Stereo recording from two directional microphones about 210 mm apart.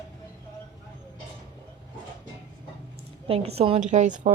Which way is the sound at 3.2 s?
30° right (ahead or behind).